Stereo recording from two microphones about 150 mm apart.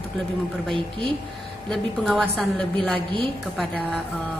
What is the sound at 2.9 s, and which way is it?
Speech, 35° right (ahead or behind).